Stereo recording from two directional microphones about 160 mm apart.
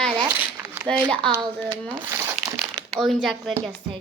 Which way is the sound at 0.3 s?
15° right (ahead or behind).